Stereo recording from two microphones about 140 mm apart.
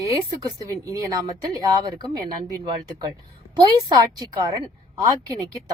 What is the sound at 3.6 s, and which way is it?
Speech, 25° right (ahead or behind).